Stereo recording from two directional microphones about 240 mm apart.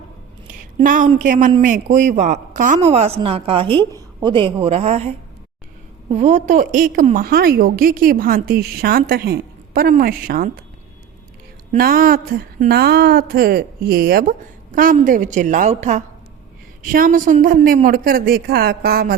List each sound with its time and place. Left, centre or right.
0.8 s a man's voice: right
11.7 s speech: right